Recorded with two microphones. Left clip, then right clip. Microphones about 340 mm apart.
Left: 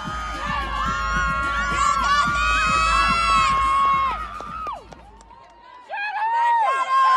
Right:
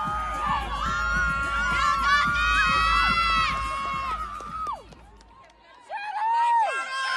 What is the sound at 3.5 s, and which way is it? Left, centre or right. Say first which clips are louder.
Run: left 10 dB; left.